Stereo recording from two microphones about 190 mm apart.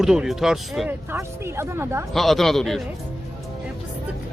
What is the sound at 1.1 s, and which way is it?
Speech, 15° right (ahead or behind).